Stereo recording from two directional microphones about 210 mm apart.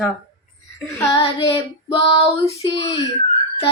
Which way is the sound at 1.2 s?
25° left (ahead or behind).